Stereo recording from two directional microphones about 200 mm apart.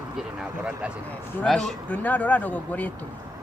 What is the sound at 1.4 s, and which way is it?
Speech, 5° left (ahead or behind).